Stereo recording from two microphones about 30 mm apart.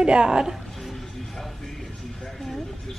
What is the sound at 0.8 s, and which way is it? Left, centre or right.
Music, centre.